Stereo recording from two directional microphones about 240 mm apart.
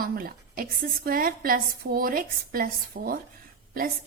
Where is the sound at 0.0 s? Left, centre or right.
Right.